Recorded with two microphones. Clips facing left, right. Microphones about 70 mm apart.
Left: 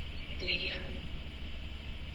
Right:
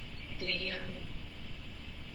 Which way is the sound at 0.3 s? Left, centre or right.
Right.